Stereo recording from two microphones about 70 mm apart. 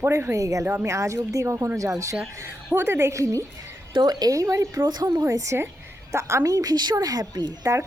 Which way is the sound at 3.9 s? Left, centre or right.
Right.